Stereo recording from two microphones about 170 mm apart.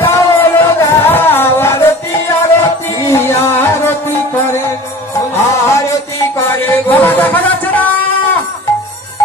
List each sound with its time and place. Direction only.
0.0 s music: 15° left (ahead or behind)
5.3 s music: 15° left (ahead or behind)